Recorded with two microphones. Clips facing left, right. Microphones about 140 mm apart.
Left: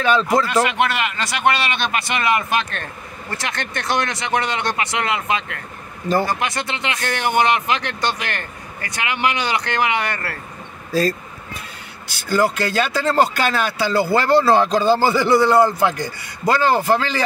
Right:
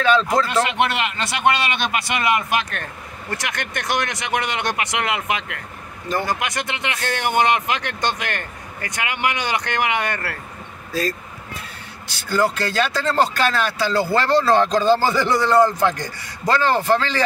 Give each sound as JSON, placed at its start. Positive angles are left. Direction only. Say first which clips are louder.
{"t": 0.0, "sound": "a man's voice", "louder": "even", "side_deg": 10}
{"t": 0.7, "sound": "speech", "louder": "left 1 dB", "side_deg": -25}
{"t": 10.9, "sound": "speech", "louder": "left 5 dB", "side_deg": 35}
{"t": 12.1, "sound": "a man's voice", "louder": "left 2 dB", "side_deg": 10}